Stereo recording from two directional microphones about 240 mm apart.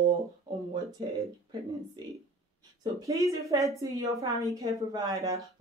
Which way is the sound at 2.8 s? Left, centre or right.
Centre.